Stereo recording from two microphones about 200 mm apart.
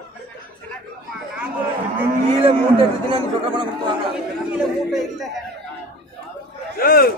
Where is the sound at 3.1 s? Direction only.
25° right (ahead or behind).